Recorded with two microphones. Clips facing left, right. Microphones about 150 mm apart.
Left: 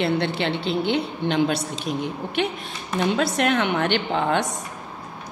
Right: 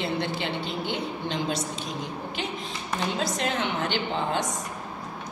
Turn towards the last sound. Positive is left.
turn(degrees=65)  # may be behind; listen again after turning